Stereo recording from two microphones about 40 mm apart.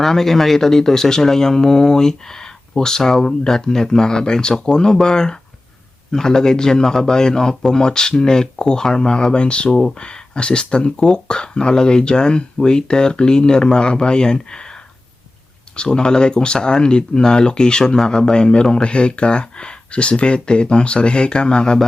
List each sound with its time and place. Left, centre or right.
0.0 s speech: centre